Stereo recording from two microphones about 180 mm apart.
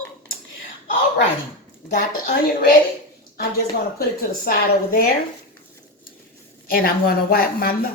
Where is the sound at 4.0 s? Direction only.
55° left (ahead or behind).